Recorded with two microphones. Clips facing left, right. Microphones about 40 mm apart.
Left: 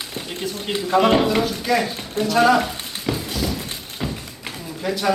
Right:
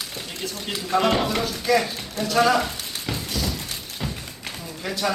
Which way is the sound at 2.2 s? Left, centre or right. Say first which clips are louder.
Left 3 dB; centre.